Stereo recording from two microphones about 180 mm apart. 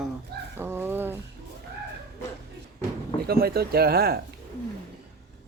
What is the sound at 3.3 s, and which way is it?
Speech, 60° right (ahead or behind).